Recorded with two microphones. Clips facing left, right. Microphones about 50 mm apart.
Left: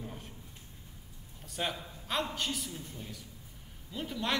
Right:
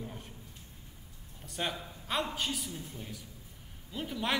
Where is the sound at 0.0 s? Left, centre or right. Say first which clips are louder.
Even; centre.